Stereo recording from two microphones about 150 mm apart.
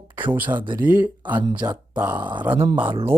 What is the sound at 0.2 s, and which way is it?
Speech, 10° right (ahead or behind).